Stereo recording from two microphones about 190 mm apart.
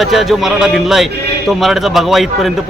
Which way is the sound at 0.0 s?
Centre (ahead or behind).